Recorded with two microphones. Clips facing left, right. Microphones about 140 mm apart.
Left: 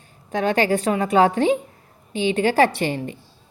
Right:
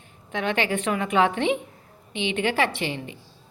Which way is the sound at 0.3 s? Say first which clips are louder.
Left 6 dB; 40° left (ahead or behind).